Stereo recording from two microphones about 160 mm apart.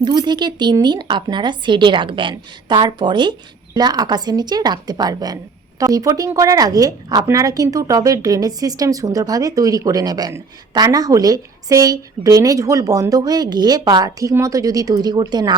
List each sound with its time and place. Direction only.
0.0 s a woman's voice: 25° right (ahead or behind)